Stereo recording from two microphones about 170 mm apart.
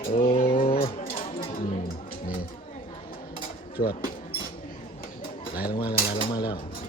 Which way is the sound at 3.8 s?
60° left (ahead or behind).